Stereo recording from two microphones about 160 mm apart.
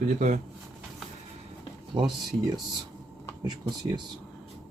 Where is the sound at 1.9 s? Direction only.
25° right (ahead or behind).